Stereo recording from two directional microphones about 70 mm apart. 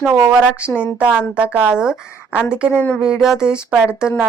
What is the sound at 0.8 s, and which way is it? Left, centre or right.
A woman's voice, centre.